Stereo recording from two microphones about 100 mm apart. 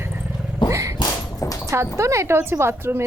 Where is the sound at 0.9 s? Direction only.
40° left (ahead or behind).